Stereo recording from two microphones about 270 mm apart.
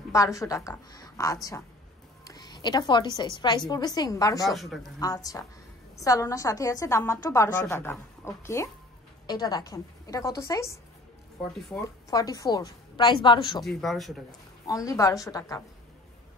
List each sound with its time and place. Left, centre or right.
0.1 s a woman's voice: centre
4.5 s speech: centre
4.9 s a woman's voice: centre
12.1 s a woman's voice: centre
13.7 s speech: centre
14.7 s a woman's voice: centre